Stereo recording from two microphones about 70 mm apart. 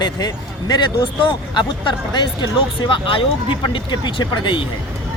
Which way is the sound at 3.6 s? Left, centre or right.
Left.